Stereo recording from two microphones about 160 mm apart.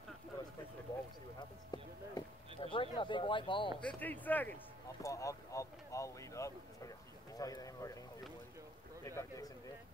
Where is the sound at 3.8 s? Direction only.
10° left (ahead or behind).